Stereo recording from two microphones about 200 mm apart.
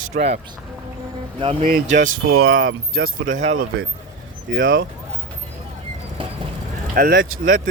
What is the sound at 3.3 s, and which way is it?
Speech, 85° right.